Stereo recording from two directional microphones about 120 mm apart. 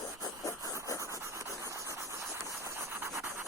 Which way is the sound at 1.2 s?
25° right (ahead or behind).